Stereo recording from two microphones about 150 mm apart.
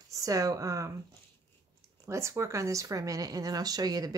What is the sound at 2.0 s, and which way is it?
Speech, 20° right (ahead or behind).